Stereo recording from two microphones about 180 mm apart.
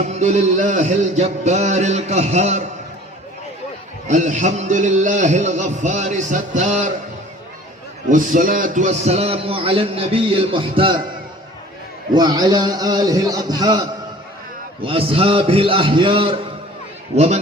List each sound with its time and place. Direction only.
0.0 s a man's voice: 40° right (ahead or behind)
4.0 s a man's voice: 40° right (ahead or behind)
8.1 s a man's voice: 45° right (ahead or behind); by 11.0 s 30° right (ahead or behind)
12.1 s a man's voice: 20° right (ahead or behind)